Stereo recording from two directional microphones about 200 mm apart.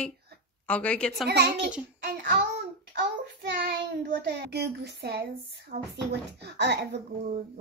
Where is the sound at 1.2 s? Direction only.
55° right (ahead or behind).